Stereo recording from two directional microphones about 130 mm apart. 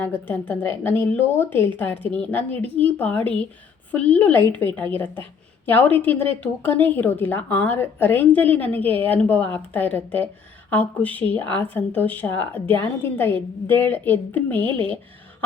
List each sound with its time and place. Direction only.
0.0 s a woman's voice: 15° left (ahead or behind)